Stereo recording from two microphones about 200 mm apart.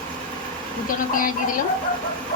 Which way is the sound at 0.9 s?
45° left (ahead or behind).